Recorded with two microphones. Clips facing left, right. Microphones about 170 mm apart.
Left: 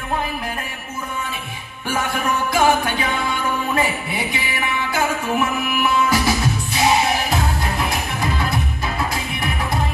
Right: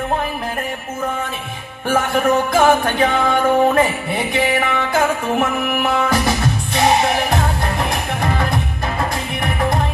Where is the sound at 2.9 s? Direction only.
50° right (ahead or behind).